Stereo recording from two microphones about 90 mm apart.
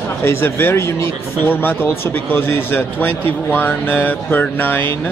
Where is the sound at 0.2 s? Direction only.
30° left (ahead or behind).